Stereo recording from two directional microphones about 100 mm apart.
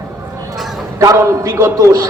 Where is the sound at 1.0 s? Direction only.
30° right (ahead or behind).